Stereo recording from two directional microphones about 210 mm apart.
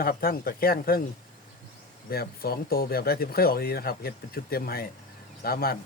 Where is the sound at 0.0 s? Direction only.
45° left (ahead or behind).